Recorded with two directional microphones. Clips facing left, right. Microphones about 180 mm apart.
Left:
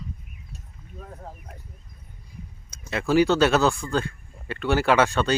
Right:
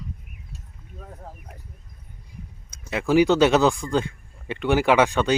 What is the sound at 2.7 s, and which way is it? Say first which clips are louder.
Speech: right 2 dB; 15° right (ahead or behind).